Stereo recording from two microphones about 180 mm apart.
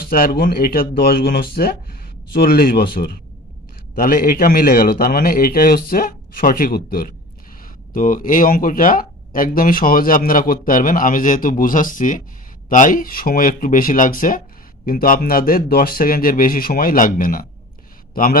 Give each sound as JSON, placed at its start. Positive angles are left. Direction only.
{"t": 0.1, "sound": "a man's voice", "side_deg": 55}